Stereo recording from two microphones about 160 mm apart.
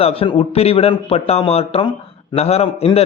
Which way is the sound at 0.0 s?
35° left (ahead or behind).